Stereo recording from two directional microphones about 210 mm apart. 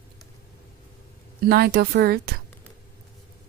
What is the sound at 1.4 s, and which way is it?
Speech, 50° right (ahead or behind).